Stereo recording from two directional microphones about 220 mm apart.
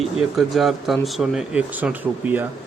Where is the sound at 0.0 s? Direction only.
Centre (ahead or behind).